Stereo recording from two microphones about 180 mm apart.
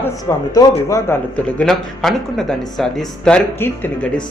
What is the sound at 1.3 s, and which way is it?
Speech, 5° left (ahead or behind).